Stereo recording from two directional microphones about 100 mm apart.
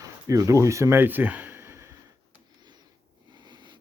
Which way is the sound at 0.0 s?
35° right (ahead or behind).